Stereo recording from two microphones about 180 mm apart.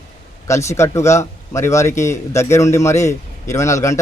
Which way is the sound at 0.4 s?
15° left (ahead or behind).